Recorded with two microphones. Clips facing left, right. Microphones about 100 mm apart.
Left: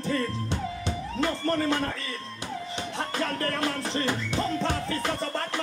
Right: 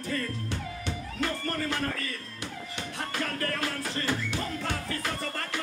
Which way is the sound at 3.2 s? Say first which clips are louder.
Left 3 dB; 25° left (ahead or behind).